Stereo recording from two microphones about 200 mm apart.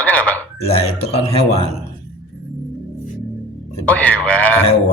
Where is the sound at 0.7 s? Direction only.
30° left (ahead or behind).